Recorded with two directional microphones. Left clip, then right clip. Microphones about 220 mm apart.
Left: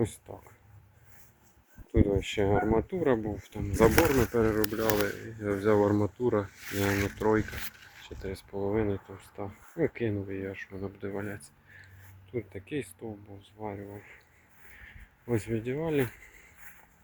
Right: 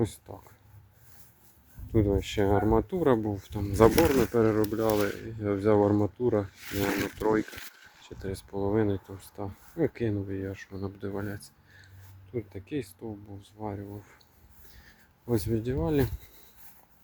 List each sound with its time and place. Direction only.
0.0 s speech: centre (ahead or behind)
1.9 s speech: 10° right (ahead or behind)
3.9 s speech: 10° right (ahead or behind)
8.0 s speech: 15° right (ahead or behind)
15.3 s speech: 10° right (ahead or behind)